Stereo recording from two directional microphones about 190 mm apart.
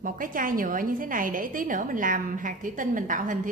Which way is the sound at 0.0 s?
45° right (ahead or behind).